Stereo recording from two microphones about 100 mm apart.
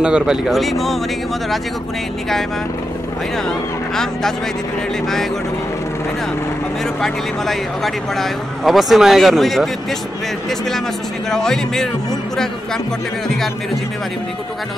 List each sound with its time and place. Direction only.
0.0 s speech: 10° right (ahead or behind)
3.4 s speech: 5° left (ahead or behind)
7.0 s speech: centre (ahead or behind)
11.2 s speech: 5° left (ahead or behind)